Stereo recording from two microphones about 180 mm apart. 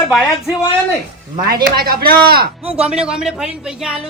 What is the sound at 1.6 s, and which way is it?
Speech, 60° right (ahead or behind).